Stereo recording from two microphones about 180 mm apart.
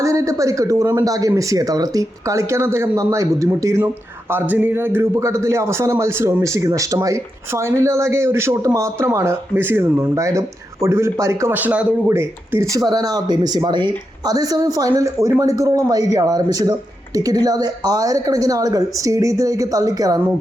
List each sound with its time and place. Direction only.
0.0 s a man's voice: 15° right (ahead or behind)